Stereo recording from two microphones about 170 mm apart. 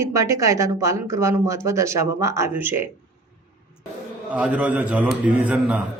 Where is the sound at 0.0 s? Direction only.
20° right (ahead or behind).